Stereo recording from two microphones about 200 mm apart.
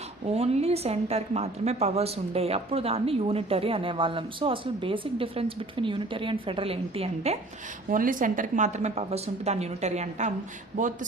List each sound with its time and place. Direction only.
0.3 s a woman's voice: 30° right (ahead or behind)
7.9 s a woman's voice: 40° right (ahead or behind)